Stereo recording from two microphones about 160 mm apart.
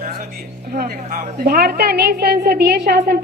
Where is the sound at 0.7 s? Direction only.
70° right (ahead or behind).